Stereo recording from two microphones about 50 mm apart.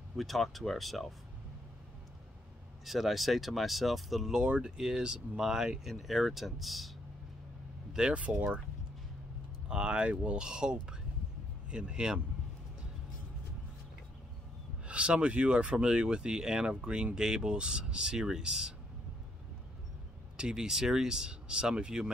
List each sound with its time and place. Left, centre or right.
0.1 s speech: centre
2.8 s speech: centre
4.4 s speech: centre
8.1 s speech: right
9.7 s speech: centre
14.9 s speech: right
20.3 s speech: centre